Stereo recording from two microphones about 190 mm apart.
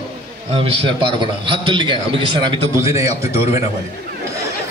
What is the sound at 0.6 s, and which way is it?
A man's voice, 25° right (ahead or behind).